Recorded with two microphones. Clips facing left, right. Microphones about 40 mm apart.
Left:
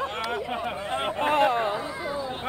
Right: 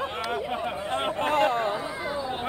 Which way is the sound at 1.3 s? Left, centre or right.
Left.